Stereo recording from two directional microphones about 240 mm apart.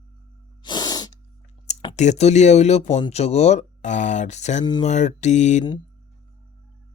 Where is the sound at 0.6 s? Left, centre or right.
Centre.